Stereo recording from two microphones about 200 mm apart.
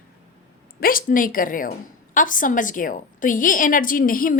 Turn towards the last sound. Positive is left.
turn(degrees=45)  # may be behind; listen again after turning